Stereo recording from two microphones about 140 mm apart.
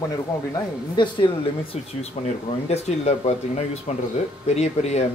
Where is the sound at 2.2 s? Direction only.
45° left (ahead or behind).